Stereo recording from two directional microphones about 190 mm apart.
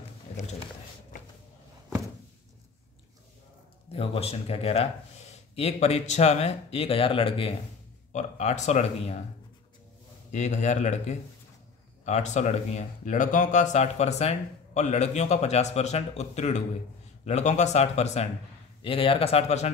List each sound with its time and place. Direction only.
0.3 s a sound: 35° left (ahead or behind)
3.9 s speech: 30° left (ahead or behind)
10.3 s speech: 40° left (ahead or behind)